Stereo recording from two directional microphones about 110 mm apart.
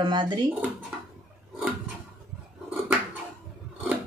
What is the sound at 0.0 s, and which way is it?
Speech, 45° right (ahead or behind).